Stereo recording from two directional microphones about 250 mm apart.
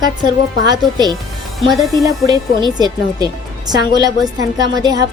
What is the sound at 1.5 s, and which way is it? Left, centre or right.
Speech, centre.